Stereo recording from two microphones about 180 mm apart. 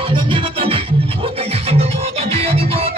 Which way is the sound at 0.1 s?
30° right (ahead or behind).